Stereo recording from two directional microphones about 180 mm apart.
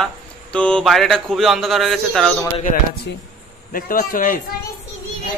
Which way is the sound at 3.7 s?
50° left (ahead or behind).